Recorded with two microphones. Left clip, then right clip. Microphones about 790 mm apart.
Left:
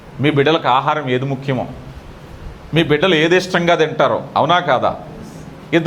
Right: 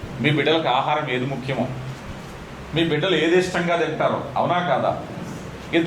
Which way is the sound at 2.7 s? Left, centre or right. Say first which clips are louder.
Left 7 dB; left.